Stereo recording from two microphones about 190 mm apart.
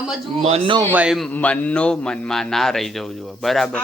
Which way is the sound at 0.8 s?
10° right (ahead or behind).